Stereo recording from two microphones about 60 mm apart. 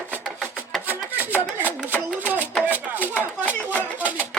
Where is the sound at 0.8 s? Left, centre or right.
Right.